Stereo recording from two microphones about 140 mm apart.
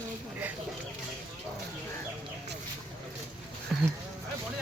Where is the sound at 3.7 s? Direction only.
Centre (ahead or behind).